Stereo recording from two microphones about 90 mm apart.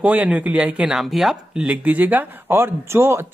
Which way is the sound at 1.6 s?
15° right (ahead or behind).